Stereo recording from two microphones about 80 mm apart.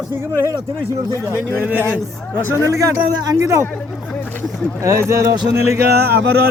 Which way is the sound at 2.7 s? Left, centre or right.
Right.